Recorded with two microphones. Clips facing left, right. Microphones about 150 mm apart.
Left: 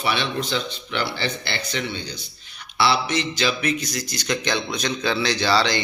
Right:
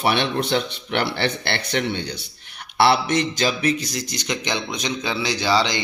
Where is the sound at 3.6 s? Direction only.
30° right (ahead or behind).